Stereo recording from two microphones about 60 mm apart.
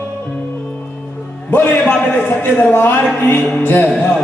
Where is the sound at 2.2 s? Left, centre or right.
Left.